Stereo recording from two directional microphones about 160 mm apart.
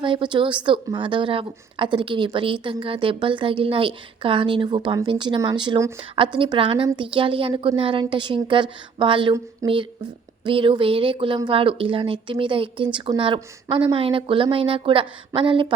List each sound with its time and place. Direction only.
0.0 s a woman's voice: 30° right (ahead or behind)
9.6 s speech: 20° right (ahead or behind)
10.4 s a woman's voice: 30° right (ahead or behind)